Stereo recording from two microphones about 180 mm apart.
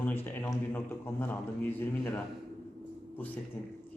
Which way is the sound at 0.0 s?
10° left (ahead or behind).